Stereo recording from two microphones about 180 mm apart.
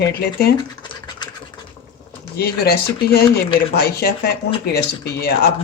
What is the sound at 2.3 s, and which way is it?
Speech, 60° left (ahead or behind).